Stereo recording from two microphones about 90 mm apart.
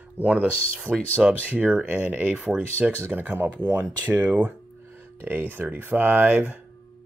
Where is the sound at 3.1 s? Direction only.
20° right (ahead or behind).